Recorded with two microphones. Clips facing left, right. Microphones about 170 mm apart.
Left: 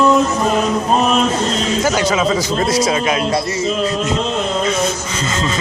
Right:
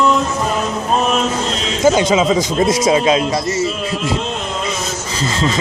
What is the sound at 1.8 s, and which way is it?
A man's voice, 20° right (ahead or behind).